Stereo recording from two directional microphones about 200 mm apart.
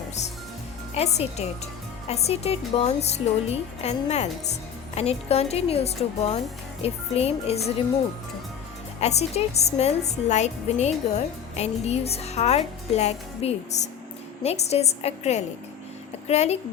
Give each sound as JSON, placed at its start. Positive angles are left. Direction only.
{"t": 0.9, "sound": "speech", "side_deg": 30}
{"t": 9.0, "sound": "speech", "side_deg": 35}